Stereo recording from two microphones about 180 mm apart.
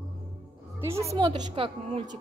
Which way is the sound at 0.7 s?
15° right (ahead or behind).